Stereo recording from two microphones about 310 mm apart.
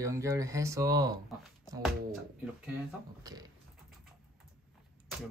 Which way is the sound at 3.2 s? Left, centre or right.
Centre.